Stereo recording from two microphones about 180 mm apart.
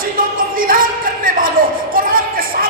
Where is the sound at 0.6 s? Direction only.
50° right (ahead or behind).